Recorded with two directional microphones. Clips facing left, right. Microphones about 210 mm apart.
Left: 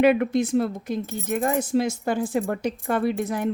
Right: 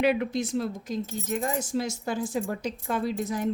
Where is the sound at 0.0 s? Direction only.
55° left (ahead or behind).